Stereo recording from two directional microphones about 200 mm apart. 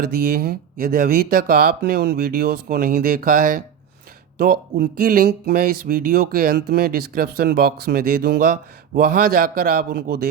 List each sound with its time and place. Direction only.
0.0 s speech: 50° right (ahead or behind)